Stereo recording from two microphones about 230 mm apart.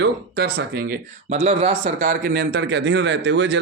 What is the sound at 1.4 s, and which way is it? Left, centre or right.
Speech, right.